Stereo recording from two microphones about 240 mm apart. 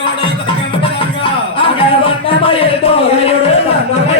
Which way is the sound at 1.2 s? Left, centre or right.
Left.